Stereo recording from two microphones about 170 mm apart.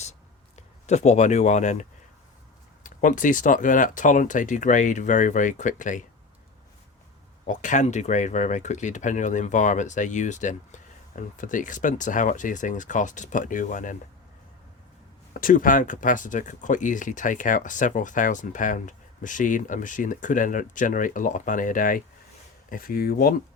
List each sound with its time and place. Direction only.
0.9 s speech: 40° left (ahead or behind)
7.4 s speech: 45° left (ahead or behind)
15.3 s speech: 55° left (ahead or behind)